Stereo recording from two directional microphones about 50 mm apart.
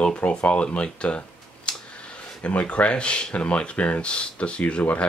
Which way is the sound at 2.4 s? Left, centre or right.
Left.